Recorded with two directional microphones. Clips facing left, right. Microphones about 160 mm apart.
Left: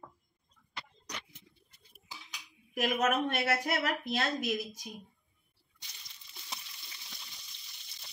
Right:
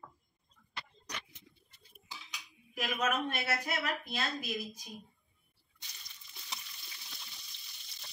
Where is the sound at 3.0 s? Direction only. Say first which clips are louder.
Left 2 dB; 50° left (ahead or behind); by 4.8 s 65° left (ahead or behind).